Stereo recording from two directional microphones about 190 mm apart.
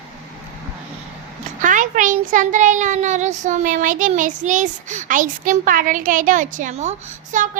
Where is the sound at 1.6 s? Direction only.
40° right (ahead or behind).